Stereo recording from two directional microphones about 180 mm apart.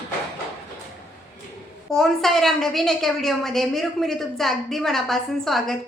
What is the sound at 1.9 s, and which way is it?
A woman's voice, centre (ahead or behind).